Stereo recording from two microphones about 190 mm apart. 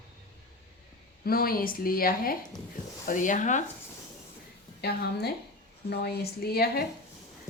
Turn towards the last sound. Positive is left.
turn(degrees=55)  # may be behind; listen again after turning